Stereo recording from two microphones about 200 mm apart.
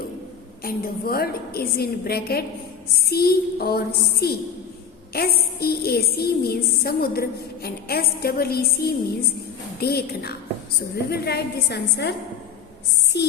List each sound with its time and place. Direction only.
0.6 s a woman's voice: 50° left (ahead or behind)
13.1 s a woman's voice: 55° left (ahead or behind)